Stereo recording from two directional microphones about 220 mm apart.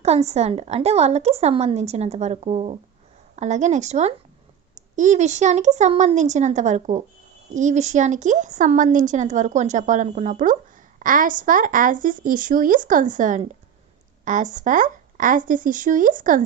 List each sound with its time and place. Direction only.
0.0 s a woman's voice: 30° right (ahead or behind)